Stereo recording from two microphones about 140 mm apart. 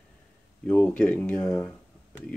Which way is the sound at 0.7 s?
5° left (ahead or behind).